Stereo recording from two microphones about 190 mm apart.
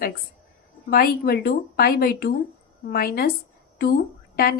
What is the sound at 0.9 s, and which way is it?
Speech, 50° left (ahead or behind).